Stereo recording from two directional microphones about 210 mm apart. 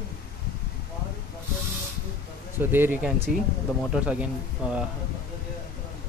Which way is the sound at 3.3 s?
45° right (ahead or behind).